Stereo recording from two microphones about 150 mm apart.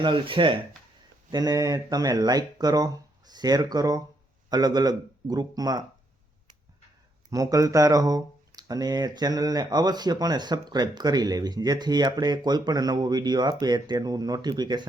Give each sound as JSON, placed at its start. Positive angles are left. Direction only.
{"t": 0.0, "sound": "speech", "side_deg": -35}
{"t": 7.3, "sound": "speech", "side_deg": -25}